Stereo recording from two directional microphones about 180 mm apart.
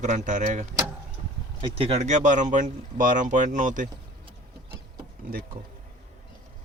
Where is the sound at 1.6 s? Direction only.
30° right (ahead or behind).